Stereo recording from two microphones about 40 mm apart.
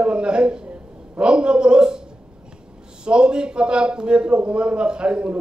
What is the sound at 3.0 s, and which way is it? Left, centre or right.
A man's voice, right.